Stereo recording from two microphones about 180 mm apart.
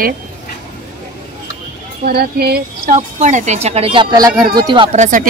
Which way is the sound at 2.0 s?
60° right (ahead or behind).